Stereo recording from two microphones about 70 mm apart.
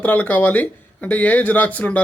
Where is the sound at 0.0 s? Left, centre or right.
Left.